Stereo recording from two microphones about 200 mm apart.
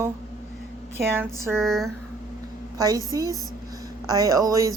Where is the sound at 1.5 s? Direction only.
Centre (ahead or behind).